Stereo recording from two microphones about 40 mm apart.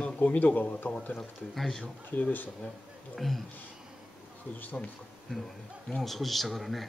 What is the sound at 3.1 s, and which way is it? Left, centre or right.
Speech, centre.